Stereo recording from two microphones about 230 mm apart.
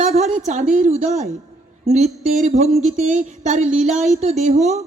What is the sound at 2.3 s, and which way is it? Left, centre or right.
Speech, right.